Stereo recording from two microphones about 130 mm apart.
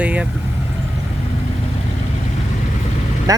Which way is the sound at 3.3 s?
30° right (ahead or behind).